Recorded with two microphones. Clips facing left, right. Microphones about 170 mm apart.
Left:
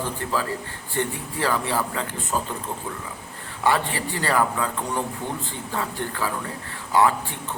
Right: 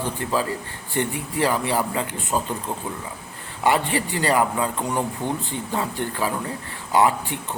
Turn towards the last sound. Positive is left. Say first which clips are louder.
# right 1 dB
turn(degrees=-20)  # may be behind; listen again after turning